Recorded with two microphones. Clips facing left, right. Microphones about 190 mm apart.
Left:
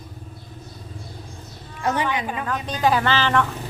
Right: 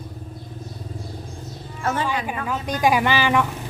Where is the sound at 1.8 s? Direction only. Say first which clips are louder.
Left 1 dB; 15° left (ahead or behind).